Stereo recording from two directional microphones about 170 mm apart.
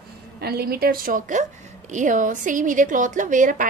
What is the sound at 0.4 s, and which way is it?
A woman's voice, 65° right (ahead or behind).